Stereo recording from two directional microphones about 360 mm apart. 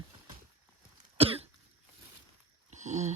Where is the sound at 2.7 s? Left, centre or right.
Centre.